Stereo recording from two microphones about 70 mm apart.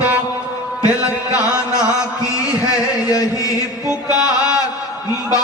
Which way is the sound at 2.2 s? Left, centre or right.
Left.